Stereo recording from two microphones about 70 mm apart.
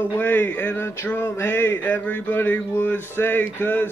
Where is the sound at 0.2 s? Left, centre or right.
Left.